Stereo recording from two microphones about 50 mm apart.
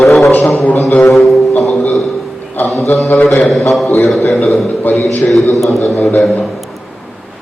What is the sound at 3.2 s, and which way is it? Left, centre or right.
A man's voice, centre.